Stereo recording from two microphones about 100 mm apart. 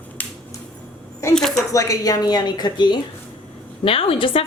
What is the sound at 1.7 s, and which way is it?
A woman's voice, 35° left (ahead or behind).